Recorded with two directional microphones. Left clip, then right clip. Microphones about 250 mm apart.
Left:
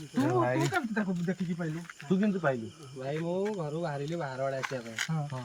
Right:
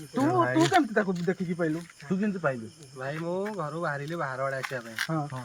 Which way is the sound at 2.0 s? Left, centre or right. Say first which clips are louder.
Even; centre.